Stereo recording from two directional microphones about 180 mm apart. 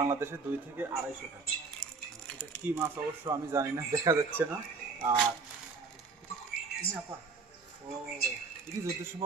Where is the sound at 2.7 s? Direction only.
15° right (ahead or behind).